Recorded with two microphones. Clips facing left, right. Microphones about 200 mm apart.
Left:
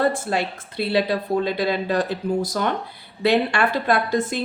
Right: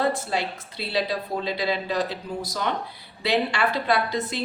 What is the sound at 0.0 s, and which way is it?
A woman's voice, 55° left (ahead or behind).